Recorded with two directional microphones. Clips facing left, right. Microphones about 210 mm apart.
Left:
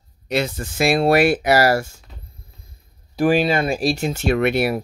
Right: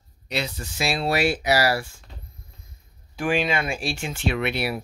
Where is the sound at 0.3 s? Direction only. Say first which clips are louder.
Left 7 dB; 50° left (ahead or behind).